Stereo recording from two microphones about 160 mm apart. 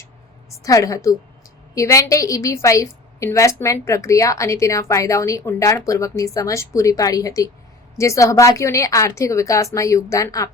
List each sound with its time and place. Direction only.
0.6 s a woman's voice: 20° left (ahead or behind)